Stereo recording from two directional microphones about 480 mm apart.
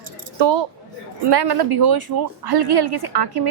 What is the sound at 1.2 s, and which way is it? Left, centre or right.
A woman's voice, right.